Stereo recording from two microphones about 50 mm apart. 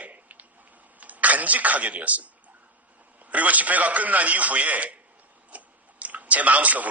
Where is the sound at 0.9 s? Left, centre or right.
Right.